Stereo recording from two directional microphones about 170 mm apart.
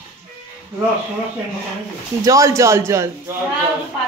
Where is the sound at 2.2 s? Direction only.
20° right (ahead or behind).